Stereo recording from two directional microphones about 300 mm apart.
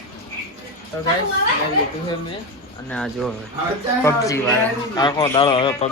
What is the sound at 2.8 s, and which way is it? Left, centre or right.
Speech, centre.